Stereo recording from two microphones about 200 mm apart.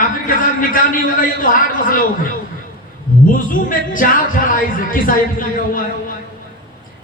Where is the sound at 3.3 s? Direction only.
45° left (ahead or behind).